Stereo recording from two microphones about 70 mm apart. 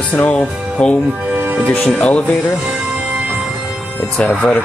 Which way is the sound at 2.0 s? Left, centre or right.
Centre.